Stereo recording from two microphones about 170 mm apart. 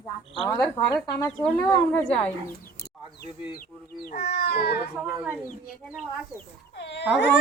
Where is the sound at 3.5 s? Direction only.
55° left (ahead or behind).